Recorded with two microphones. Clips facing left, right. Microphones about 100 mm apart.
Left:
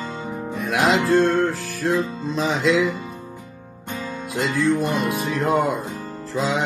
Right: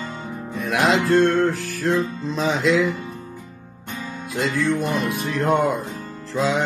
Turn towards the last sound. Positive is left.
turn(degrees=0)  # may be behind; listen again after turning